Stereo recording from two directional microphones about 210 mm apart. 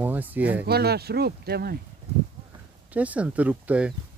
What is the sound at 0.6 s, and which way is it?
Speech, 50° right (ahead or behind).